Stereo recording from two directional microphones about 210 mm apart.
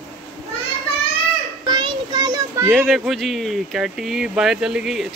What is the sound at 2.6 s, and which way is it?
Speech, centre (ahead or behind).